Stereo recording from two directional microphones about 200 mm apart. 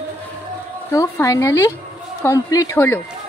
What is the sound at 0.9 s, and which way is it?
A woman's voice, 15° left (ahead or behind).